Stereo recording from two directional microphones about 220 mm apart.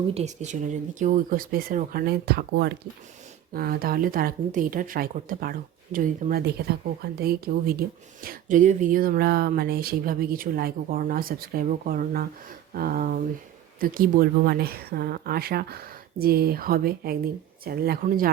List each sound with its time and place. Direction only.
0.1 s a woman's voice: 30° right (ahead or behind)